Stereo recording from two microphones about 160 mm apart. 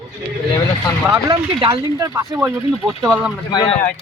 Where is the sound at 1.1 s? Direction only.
30° right (ahead or behind).